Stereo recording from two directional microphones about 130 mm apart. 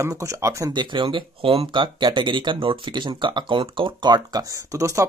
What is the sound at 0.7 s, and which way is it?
Speech, 40° right (ahead or behind).